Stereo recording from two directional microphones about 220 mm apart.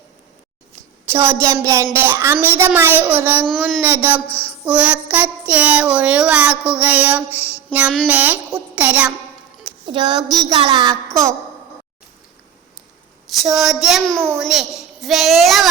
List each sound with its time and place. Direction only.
1.1 s child singing: 10° right (ahead or behind)
3.5 s a child's voice: centre (ahead or behind)
3.8 s child singing: 10° right (ahead or behind)
9.8 s a woman's voice: 20° right (ahead or behind)
13.2 s a child's voice: centre (ahead or behind)